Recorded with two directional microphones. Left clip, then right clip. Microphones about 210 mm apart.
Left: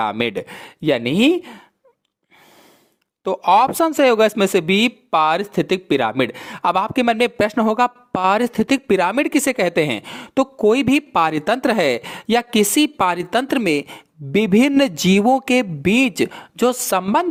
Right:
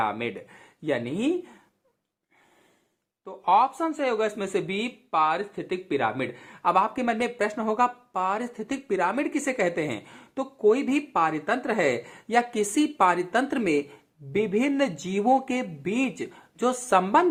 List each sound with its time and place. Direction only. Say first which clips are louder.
0.0 s speech: left 7 dB; 60° left (ahead or behind)
3.2 s speech: left 7 dB; 55° left (ahead or behind)